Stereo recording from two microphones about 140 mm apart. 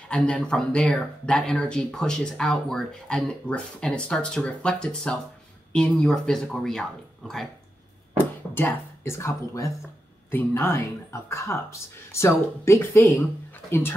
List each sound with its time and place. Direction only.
0.1 s speech: 5° left (ahead or behind)
8.5 s speech: 15° left (ahead or behind)